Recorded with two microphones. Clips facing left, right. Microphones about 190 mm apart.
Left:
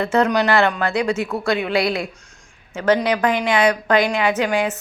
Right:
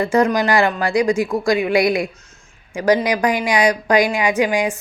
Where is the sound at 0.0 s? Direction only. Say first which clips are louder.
Right 1 dB; 10° right (ahead or behind).